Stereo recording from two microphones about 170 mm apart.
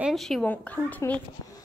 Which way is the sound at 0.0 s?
Centre (ahead or behind).